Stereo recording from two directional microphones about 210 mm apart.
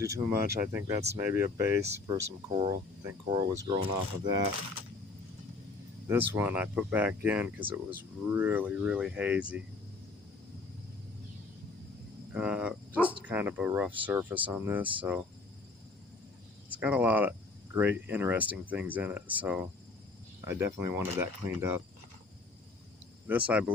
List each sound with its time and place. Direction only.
0.0 s speech: 10° right (ahead or behind)
6.1 s speech: 10° right (ahead or behind)
12.3 s speech: 5° right (ahead or behind)
16.7 s speech: 10° right (ahead or behind)
23.5 s speech: 5° right (ahead or behind)